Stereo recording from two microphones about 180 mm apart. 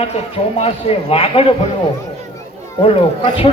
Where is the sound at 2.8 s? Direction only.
30° left (ahead or behind).